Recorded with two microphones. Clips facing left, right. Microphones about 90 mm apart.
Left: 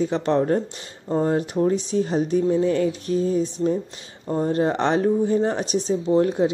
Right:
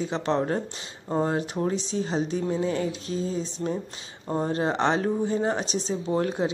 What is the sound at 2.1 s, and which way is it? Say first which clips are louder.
Speech: left 7 dB; 50° left (ahead or behind).